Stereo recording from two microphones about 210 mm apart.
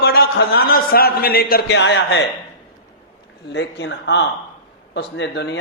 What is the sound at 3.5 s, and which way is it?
A man's voice, 60° left (ahead or behind).